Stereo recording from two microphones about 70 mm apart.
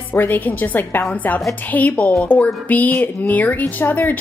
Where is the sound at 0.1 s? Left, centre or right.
Left.